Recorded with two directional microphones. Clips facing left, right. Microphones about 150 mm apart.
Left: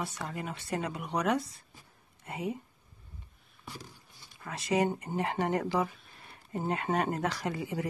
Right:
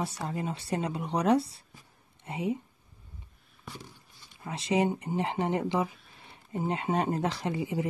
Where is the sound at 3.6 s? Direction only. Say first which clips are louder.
Right 1 dB; centre (ahead or behind).